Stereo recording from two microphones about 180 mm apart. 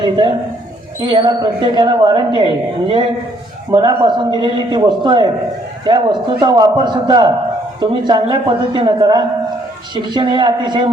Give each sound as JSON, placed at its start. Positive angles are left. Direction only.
{"t": 0.0, "sound": "a man's voice", "side_deg": -25}